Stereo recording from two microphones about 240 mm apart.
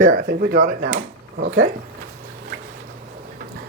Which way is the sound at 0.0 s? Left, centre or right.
Right.